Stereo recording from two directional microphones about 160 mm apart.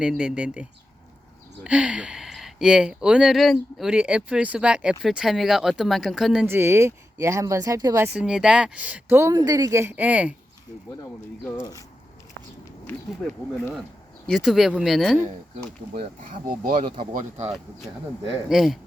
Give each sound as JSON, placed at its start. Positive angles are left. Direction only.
{"t": 0.0, "sound": "speech", "side_deg": -5}
{"t": 6.4, "sound": "speech", "side_deg": -15}
{"t": 8.0, "sound": "speech", "side_deg": -5}
{"t": 14.3, "sound": "speech", "side_deg": 0}
{"t": 16.6, "sound": "speech", "side_deg": -60}
{"t": 18.4, "sound": "speech", "side_deg": -5}